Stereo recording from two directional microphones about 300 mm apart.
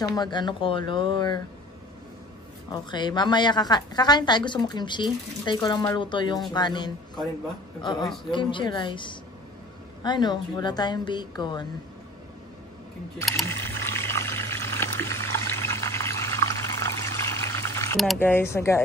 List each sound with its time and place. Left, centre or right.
0.0 s a woman's voice: centre
2.7 s a woman's voice: centre
13.2 s pour: centre